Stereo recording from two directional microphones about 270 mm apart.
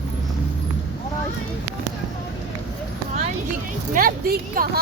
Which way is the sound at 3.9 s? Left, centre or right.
Right.